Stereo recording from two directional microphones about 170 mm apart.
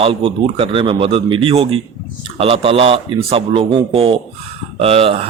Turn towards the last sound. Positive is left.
turn(degrees=-35)  # may be behind; listen again after turning